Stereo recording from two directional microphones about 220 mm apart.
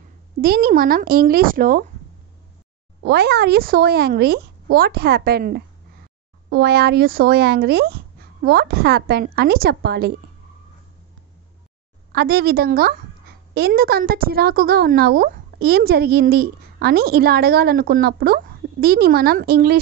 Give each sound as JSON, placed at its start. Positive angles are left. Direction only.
{"t": 0.4, "sound": "speech", "side_deg": -45}
{"t": 3.0, "sound": "speech", "side_deg": -45}
{"t": 12.1, "sound": "speech", "side_deg": -45}